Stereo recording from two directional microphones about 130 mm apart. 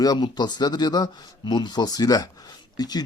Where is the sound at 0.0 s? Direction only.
30° left (ahead or behind).